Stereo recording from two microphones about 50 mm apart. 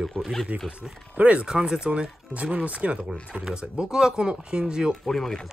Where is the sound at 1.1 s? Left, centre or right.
Right.